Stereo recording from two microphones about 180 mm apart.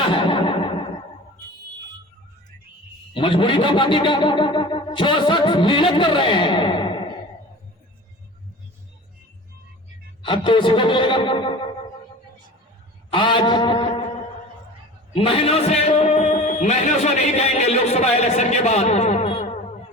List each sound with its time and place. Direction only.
0.1 s music: 30° left (ahead or behind)
3.2 s speech: 30° left (ahead or behind)
10.2 s speech: 30° left (ahead or behind)
13.1 s a sound: 25° left (ahead or behind)
15.1 s a man's voice: 30° left (ahead or behind)